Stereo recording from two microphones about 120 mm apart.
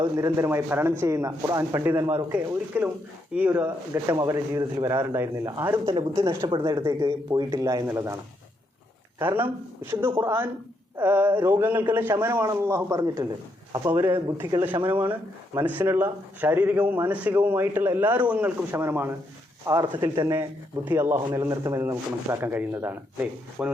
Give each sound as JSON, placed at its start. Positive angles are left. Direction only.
{"t": 0.0, "sound": "speech", "side_deg": -25}
{"t": 3.9, "sound": "speech", "side_deg": -30}
{"t": 5.8, "sound": "speech", "side_deg": -45}
{"t": 7.9, "sound": "speech", "side_deg": -20}